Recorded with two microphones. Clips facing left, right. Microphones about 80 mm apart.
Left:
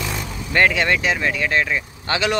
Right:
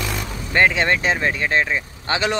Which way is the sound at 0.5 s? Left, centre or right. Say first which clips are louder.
Even; right.